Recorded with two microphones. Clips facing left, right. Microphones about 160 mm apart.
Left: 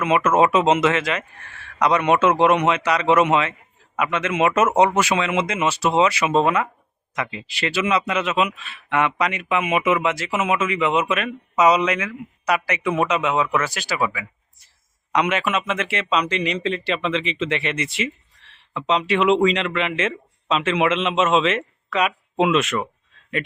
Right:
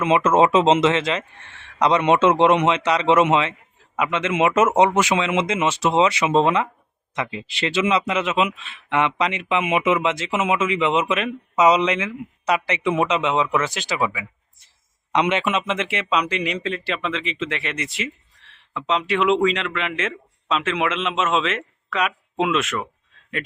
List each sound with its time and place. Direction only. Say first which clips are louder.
0.0 s speech: right 1 dB; 25° right (ahead or behind); by 22.8 s centre (ahead or behind)